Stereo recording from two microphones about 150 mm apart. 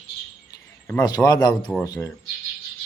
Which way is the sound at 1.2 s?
25° left (ahead or behind).